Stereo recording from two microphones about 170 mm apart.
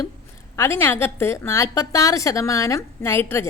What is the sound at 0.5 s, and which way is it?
A woman's voice, 15° left (ahead or behind).